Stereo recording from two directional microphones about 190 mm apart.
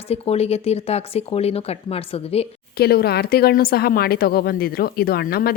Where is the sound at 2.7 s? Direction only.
55° left (ahead or behind).